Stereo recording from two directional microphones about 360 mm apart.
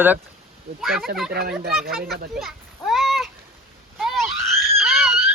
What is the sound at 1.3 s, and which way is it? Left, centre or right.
Speech, right.